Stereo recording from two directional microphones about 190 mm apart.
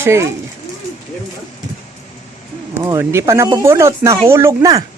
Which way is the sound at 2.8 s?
15° right (ahead or behind).